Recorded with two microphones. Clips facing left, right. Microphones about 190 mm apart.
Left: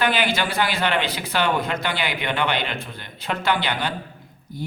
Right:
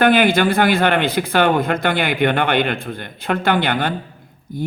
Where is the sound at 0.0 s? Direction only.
55° right (ahead or behind).